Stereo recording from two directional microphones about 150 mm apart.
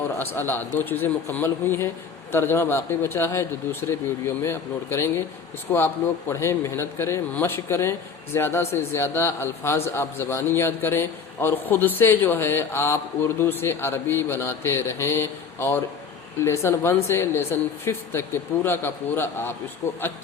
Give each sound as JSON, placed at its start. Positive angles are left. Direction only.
{"t": 0.2, "sound": "a man's voice", "side_deg": 15}